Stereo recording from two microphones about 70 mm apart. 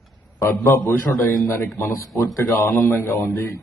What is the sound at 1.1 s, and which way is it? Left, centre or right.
Speech, left.